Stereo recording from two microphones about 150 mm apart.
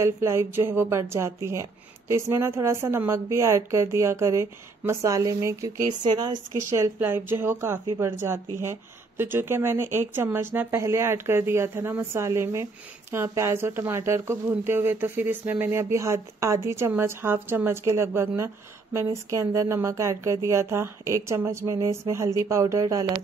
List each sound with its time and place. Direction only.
0.0 s a woman's voice: 20° right (ahead or behind)
6.5 s a woman's voice: 20° right (ahead or behind)